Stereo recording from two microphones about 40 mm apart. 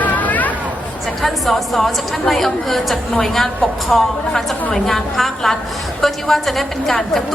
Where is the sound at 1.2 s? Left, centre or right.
Centre.